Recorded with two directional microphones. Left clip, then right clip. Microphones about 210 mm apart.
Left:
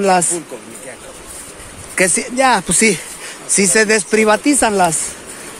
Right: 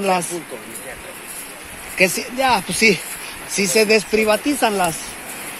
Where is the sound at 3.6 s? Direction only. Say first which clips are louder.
Left 2 dB; 40° left (ahead or behind).